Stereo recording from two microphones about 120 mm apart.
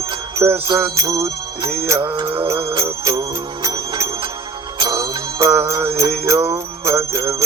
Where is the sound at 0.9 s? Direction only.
25° right (ahead or behind).